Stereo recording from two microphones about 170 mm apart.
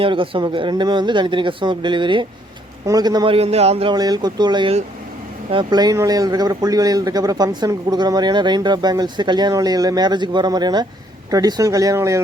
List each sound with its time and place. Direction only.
0.0 s speech: 30° right (ahead or behind)
3.3 s speech: 35° right (ahead or behind)
3.9 s speech: 25° right (ahead or behind)